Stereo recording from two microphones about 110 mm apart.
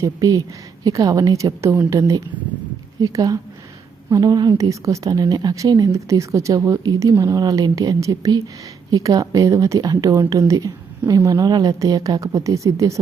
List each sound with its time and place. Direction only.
0.0 s speech: 35° right (ahead or behind)